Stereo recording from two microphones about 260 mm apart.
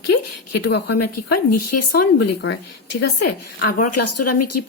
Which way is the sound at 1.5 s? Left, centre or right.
Left.